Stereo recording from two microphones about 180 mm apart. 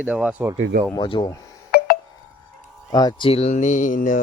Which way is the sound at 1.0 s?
25° left (ahead or behind).